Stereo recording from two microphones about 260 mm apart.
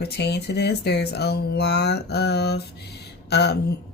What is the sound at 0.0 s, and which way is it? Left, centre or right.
Speech, left.